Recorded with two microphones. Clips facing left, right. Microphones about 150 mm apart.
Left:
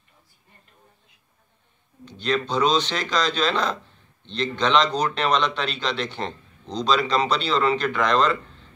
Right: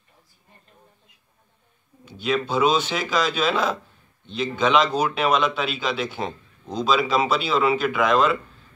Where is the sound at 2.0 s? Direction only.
5° right (ahead or behind).